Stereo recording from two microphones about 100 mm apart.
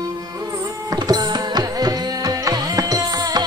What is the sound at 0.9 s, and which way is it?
Music, 40° right (ahead or behind).